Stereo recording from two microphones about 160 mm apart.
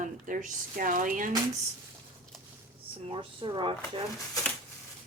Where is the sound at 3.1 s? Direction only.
30° right (ahead or behind).